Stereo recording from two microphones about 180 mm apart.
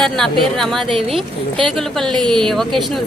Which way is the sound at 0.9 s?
30° right (ahead or behind).